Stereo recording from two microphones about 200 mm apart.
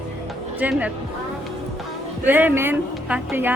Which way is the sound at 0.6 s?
5° right (ahead or behind).